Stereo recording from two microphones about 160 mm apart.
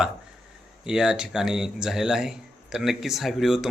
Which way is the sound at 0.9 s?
5° right (ahead or behind).